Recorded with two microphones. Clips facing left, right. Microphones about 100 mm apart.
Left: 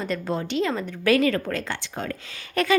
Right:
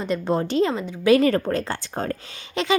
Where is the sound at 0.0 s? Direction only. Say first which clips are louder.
Right 4 dB; 25° right (ahead or behind).